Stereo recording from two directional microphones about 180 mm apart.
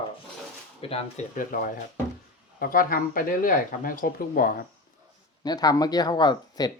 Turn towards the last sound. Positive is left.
turn(degrees=20)  # may be behind; listen again after turning